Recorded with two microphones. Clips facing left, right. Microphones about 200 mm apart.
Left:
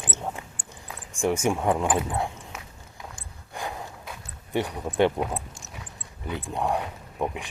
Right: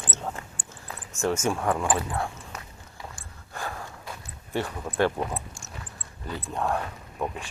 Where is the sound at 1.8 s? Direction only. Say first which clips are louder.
Left 2 dB; centre (ahead or behind).